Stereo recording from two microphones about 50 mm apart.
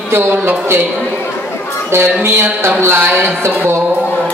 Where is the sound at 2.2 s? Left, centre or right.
Right.